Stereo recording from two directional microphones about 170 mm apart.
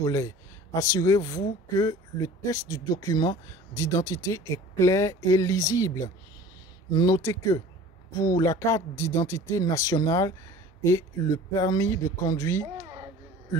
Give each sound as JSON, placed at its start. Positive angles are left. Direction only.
{"t": 0.0, "sound": "speech", "side_deg": 20}